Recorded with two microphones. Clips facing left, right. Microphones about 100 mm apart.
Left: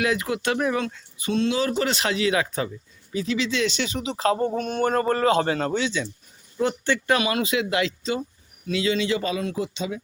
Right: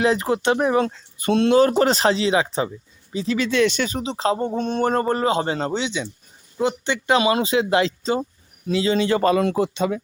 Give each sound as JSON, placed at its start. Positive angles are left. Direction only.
{"t": 0.0, "sound": "speech", "side_deg": -30}
{"t": 1.2, "sound": "speech", "side_deg": -55}
{"t": 3.3, "sound": "speech", "side_deg": -50}